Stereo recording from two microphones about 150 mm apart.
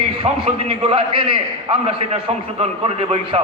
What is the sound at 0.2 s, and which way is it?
A man's voice, 40° right (ahead or behind).